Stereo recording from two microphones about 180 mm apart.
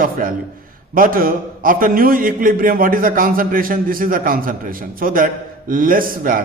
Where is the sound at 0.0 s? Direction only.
50° right (ahead or behind).